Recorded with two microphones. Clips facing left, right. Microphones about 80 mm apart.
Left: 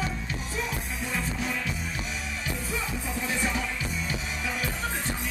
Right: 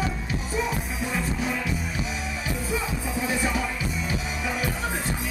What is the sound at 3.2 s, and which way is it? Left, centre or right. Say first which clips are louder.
Music: right 4 dB; centre.